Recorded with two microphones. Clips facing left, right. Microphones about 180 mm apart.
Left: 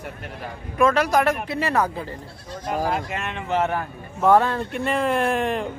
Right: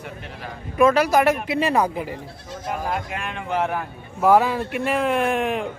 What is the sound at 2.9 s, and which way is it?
Speech, centre (ahead or behind).